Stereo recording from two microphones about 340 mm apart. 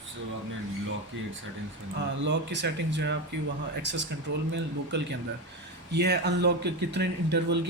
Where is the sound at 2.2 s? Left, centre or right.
Right.